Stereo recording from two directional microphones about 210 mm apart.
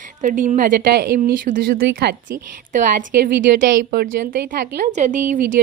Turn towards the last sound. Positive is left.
turn(degrees=-40)  # may be behind; listen again after turning